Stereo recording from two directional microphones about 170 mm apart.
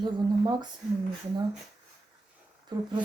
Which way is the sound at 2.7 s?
25° right (ahead or behind).